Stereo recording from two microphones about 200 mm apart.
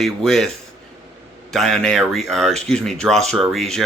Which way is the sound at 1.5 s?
Centre (ahead or behind).